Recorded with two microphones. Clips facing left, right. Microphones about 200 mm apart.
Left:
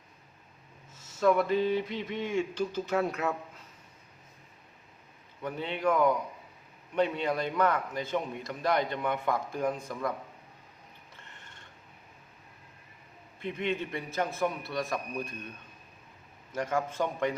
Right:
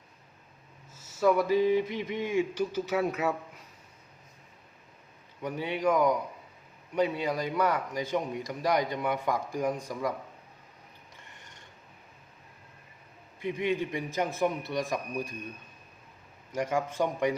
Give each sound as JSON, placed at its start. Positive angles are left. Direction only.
{"t": 1.2, "sound": "a man's voice", "side_deg": -10}
{"t": 5.4, "sound": "a man's voice", "side_deg": -10}
{"t": 13.4, "sound": "a man's voice", "side_deg": -10}
{"t": 16.6, "sound": "a man's voice", "side_deg": -15}